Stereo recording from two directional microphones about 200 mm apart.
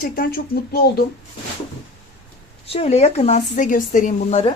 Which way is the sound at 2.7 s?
30° left (ahead or behind).